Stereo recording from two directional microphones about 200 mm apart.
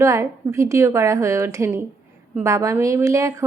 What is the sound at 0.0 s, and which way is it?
A woman's voice, 15° right (ahead or behind).